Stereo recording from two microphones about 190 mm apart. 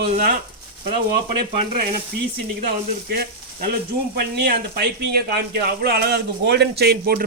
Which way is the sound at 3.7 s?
50° right (ahead or behind).